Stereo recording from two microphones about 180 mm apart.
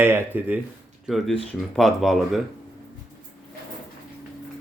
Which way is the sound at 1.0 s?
Centre (ahead or behind).